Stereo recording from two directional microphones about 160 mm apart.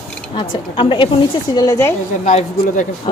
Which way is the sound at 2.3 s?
55° left (ahead or behind).